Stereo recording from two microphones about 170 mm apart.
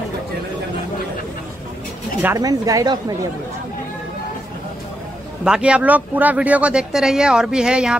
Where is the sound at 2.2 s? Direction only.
20° right (ahead or behind).